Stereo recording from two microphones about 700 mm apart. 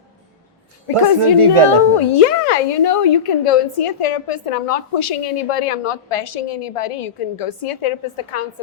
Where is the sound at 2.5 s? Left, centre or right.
Left.